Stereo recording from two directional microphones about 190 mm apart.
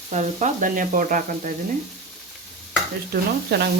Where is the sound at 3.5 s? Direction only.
60° right (ahead or behind).